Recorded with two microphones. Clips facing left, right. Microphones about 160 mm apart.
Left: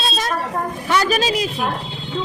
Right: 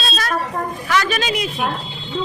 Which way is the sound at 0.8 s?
35° left (ahead or behind).